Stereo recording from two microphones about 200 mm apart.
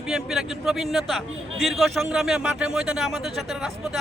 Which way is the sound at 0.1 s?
Centre (ahead or behind).